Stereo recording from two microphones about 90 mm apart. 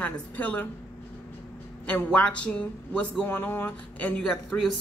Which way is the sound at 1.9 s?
15° left (ahead or behind).